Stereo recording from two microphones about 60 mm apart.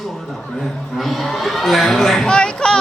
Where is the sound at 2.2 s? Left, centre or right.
Centre.